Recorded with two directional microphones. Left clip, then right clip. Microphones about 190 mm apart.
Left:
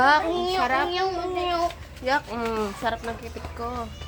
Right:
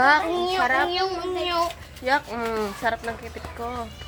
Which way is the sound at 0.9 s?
45° right (ahead or behind).